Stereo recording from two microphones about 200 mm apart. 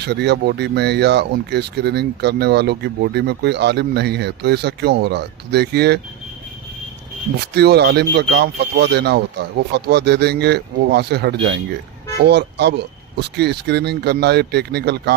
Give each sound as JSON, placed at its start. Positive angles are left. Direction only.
{"t": 0.0, "sound": "speech", "side_deg": -55}
{"t": 7.4, "sound": "speech", "side_deg": -55}